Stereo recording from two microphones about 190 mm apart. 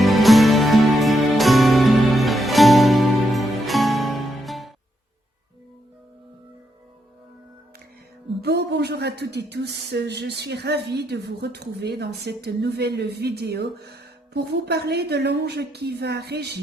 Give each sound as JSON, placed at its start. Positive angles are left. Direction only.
{"t": 0.0, "sound": "music", "side_deg": 0}
{"t": 8.4, "sound": "speech", "side_deg": -60}